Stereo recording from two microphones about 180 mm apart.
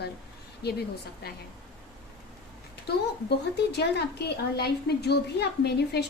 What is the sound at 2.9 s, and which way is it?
A woman's voice, 65° left (ahead or behind).